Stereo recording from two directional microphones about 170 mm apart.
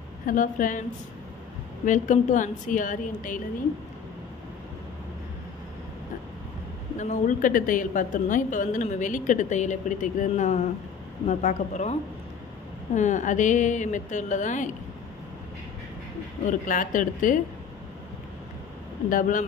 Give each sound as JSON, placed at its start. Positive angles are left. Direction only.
{"t": 0.3, "sound": "a woman's voice", "side_deg": 50}
{"t": 1.9, "sound": "a woman's voice", "side_deg": 50}
{"t": 7.0, "sound": "a woman's voice", "side_deg": 45}
{"t": 16.4, "sound": "a woman's voice", "side_deg": 50}
{"t": 19.0, "sound": "a woman's voice", "side_deg": 50}